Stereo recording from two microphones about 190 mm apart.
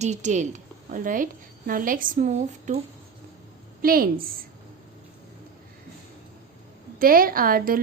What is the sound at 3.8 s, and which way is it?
Speech, 50° right (ahead or behind).